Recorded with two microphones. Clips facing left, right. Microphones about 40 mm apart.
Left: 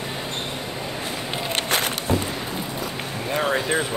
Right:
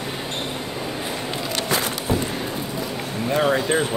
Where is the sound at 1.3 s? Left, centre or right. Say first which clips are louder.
Left 2 dB; left.